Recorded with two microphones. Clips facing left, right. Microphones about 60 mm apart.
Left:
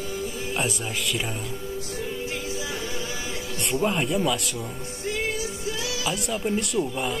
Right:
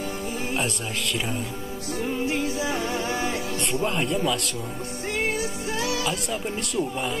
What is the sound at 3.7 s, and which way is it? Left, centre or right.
Speech, centre.